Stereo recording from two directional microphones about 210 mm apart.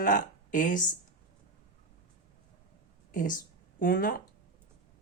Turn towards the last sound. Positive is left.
turn(degrees=40)  # may be behind; listen again after turning